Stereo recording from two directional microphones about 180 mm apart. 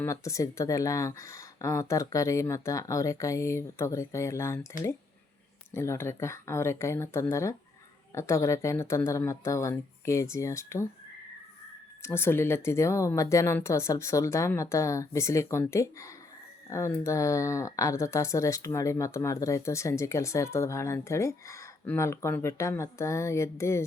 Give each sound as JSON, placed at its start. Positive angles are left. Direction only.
{"t": 0.0, "sound": "speech", "side_deg": 15}
{"t": 5.7, "sound": "speech", "side_deg": 15}
{"t": 12.0, "sound": "speech", "side_deg": 15}